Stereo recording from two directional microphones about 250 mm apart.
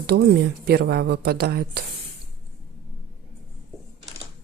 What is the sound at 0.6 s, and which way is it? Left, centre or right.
Speech, right.